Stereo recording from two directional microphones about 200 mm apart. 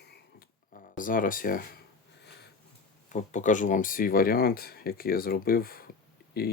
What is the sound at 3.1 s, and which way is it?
Speech, 35° left (ahead or behind).